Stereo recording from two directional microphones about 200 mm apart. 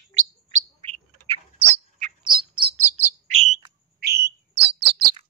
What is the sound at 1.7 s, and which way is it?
Bird, 25° right (ahead or behind).